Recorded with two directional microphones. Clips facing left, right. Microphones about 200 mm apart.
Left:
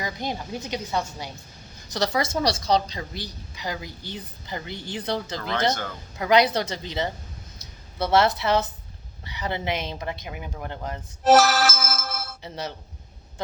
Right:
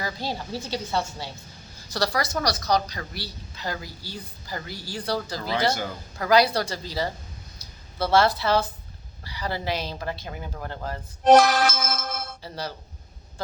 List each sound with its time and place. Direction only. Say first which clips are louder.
0.0 s a woman's voice: left 1 dB; 20° left (ahead or behind)
5.4 s speech: right 1 dB; 10° right (ahead or behind)
6.1 s a woman's voice: even; 20° left (ahead or behind)
8.1 s a woman's voice: even; 20° left (ahead or behind)
11.2 s music: right 1 dB; 5° left (ahead or behind)
12.4 s speech: left 1 dB; 20° left (ahead or behind)